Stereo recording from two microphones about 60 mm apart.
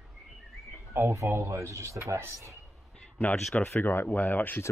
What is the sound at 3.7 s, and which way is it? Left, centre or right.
Speech, left.